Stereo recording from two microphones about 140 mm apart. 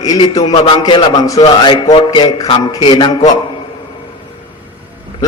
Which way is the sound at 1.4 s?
40° left (ahead or behind).